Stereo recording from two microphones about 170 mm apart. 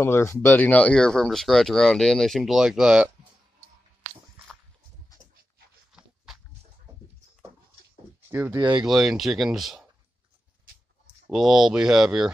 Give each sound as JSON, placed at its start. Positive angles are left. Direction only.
{"t": 0.0, "sound": "speech", "side_deg": 15}
{"t": 8.3, "sound": "speech", "side_deg": -15}
{"t": 8.5, "sound": "speech", "side_deg": -30}
{"t": 8.8, "sound": "speech", "side_deg": 0}
{"t": 11.2, "sound": "speech", "side_deg": 0}